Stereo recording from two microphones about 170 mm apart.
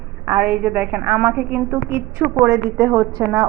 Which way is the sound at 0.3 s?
10° right (ahead or behind).